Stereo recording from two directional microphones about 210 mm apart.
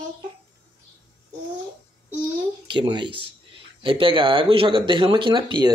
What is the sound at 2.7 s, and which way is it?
Speech, 20° right (ahead or behind).